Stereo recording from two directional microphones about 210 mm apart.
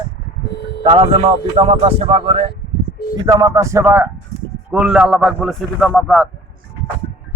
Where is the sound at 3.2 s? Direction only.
15° right (ahead or behind); by 6.3 s centre (ahead or behind).